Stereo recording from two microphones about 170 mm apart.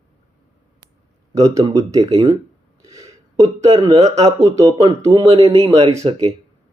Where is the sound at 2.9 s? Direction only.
20° right (ahead or behind).